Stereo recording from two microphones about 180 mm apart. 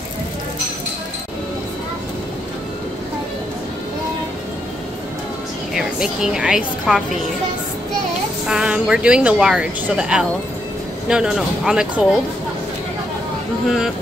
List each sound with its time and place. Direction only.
5.8 s a woman's voice: 5° right (ahead or behind)
8.5 s speech: 5° right (ahead or behind)
13.7 s speech: centre (ahead or behind)